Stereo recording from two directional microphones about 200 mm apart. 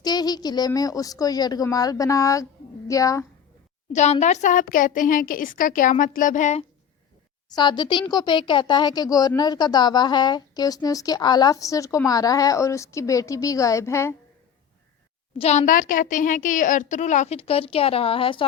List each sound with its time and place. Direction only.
0.0 s a woman's voice: 20° left (ahead or behind)
3.9 s a woman's voice: 35° left (ahead or behind)
7.5 s speech: 20° left (ahead or behind)
15.4 s a woman's voice: 35° left (ahead or behind)